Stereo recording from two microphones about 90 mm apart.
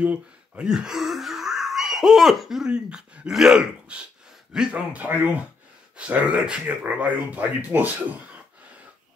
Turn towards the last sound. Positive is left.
turn(degrees=-20)  # may be behind; listen again after turning